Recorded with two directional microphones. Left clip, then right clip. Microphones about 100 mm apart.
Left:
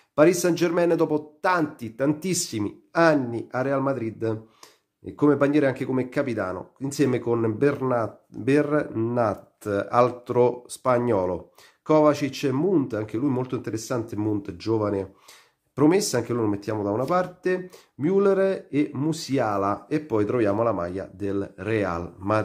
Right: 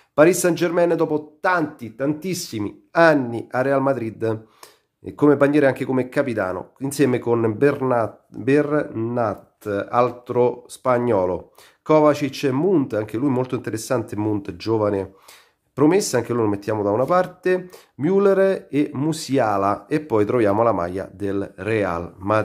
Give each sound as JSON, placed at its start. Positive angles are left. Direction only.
{"t": 0.1, "sound": "speech", "side_deg": -20}
{"t": 1.8, "sound": "speech", "side_deg": 15}
{"t": 2.3, "sound": "speech", "side_deg": 0}
{"t": 3.0, "sound": "speech", "side_deg": -15}
{"t": 10.8, "sound": "speech", "side_deg": -5}
{"t": 16.3, "sound": "speech", "side_deg": -25}